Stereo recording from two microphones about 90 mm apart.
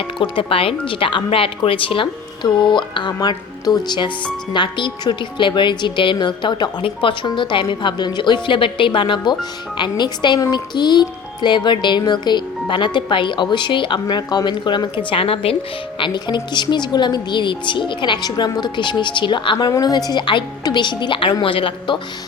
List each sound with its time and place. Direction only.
0.2 s speech: 80° left; by 10.4 s 55° left (ahead or behind)
10.5 s music: 55° left (ahead or behind)
11.4 s speech: 55° left (ahead or behind); by 15.5 s 90° left
16.0 s speech: 60° left (ahead or behind)
21.4 s speech: 80° left